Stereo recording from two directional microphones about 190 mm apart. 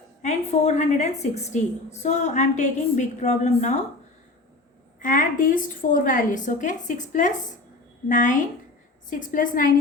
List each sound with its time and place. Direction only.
0.2 s a woman's voice: 35° left (ahead or behind)
4.9 s a woman's voice: 45° left (ahead or behind)